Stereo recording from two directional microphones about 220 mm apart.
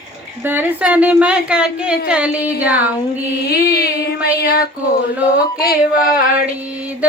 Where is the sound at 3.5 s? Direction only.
45° left (ahead or behind).